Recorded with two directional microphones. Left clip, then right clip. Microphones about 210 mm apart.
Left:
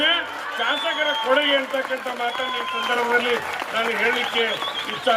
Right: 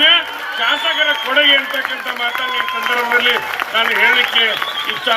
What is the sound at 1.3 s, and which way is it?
Speech, 55° left (ahead or behind).